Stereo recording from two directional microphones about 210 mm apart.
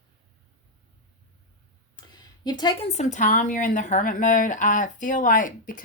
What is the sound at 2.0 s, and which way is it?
Speech, 20° left (ahead or behind).